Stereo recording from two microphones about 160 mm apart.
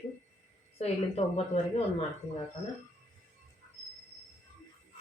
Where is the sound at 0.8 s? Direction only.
40° left (ahead or behind).